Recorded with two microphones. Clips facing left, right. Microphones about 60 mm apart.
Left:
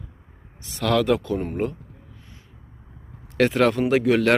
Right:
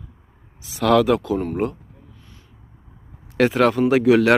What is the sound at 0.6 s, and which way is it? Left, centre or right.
Speech, centre.